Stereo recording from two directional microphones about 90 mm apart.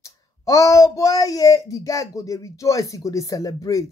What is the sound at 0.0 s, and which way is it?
Speech, 35° left (ahead or behind).